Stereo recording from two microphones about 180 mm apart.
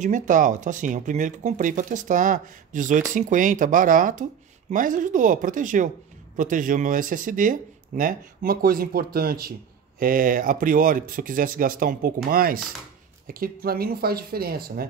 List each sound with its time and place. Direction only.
0.0 s speech: 45° right (ahead or behind)